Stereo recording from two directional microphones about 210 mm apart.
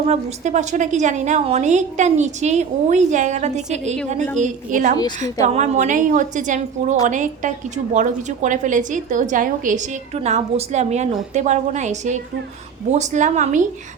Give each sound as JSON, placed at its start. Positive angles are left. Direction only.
{"t": 0.0, "sound": "a woman's voice", "side_deg": -30}